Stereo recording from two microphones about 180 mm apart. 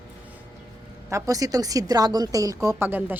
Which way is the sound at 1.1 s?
20° right (ahead or behind).